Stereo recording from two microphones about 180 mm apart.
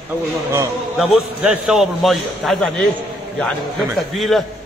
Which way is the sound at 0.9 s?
5° right (ahead or behind).